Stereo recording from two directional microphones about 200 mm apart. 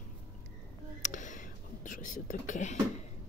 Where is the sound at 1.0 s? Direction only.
40° left (ahead or behind).